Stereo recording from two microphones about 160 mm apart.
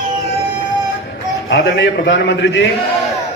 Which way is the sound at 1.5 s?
90° left.